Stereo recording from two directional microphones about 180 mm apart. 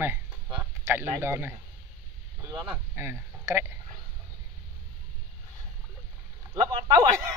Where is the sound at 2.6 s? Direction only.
10° right (ahead or behind).